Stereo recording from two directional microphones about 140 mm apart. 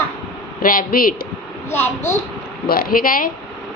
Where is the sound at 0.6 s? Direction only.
90° left.